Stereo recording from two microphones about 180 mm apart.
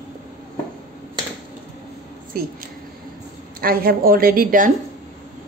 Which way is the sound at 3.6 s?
55° right (ahead or behind).